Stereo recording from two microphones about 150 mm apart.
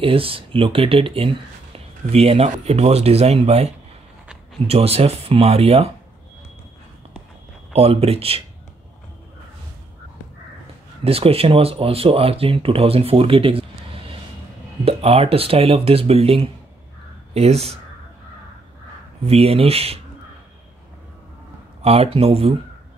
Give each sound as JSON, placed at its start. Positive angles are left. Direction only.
{"t": 0.0, "sound": "speech", "side_deg": -40}
{"t": 7.7, "sound": "speech", "side_deg": -40}
{"t": 11.1, "sound": "speech", "side_deg": -40}
{"t": 19.2, "sound": "speech", "side_deg": -40}
{"t": 21.8, "sound": "speech", "side_deg": -40}